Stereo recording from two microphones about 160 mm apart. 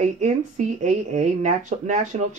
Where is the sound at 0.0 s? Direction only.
50° right (ahead or behind).